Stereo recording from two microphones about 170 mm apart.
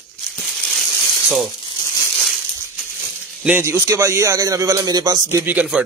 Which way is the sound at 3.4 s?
10° right (ahead or behind).